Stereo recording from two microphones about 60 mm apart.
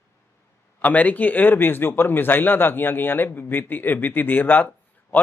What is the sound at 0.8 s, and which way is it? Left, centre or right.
Speech, left.